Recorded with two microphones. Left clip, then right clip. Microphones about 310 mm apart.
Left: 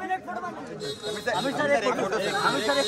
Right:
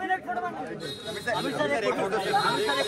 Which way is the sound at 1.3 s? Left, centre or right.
Left.